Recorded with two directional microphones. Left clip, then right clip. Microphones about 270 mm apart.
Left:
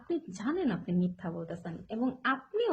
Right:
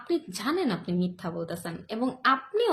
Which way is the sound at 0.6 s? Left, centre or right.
Centre.